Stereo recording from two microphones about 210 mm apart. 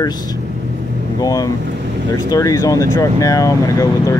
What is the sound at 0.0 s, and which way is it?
Speech, 20° left (ahead or behind).